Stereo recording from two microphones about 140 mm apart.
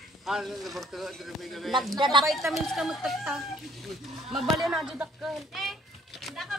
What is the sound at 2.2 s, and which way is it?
A woman's voice, centre (ahead or behind).